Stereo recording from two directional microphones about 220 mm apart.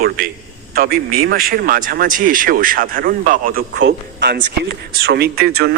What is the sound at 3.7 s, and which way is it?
Speech, 50° right (ahead or behind).